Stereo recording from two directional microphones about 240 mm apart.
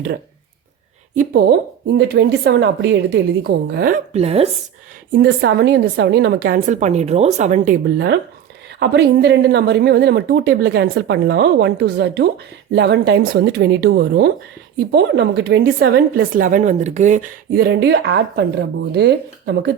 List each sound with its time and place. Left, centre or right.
1.1 s speech: right
5.1 s speech: right